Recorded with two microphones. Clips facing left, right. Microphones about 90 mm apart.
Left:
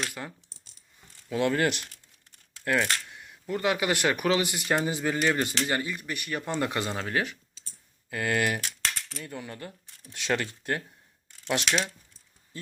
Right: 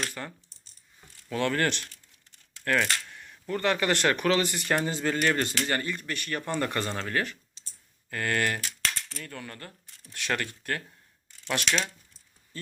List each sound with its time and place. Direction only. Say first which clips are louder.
0.1 s speech: even; 10° left (ahead or behind)
8.6 s typing: even; centre (ahead or behind)
9.2 s speech: left 6 dB; 20° left (ahead or behind)